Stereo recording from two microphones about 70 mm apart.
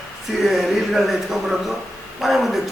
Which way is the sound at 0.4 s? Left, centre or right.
Centre.